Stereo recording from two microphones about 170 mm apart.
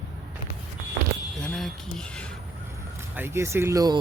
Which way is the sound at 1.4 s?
5° left (ahead or behind).